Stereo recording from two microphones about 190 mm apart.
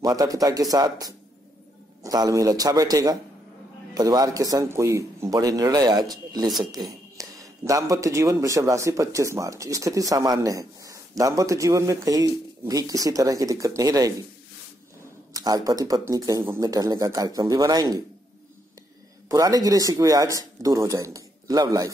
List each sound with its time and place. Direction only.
0.0 s speech: 20° right (ahead or behind)
15.3 s speech: 20° right (ahead or behind)
19.2 s speech: 20° right (ahead or behind)